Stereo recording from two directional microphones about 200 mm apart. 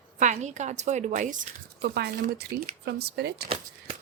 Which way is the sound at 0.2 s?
35° right (ahead or behind).